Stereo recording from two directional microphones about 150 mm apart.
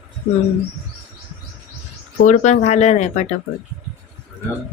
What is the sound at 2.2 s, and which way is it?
Speech, 50° left (ahead or behind).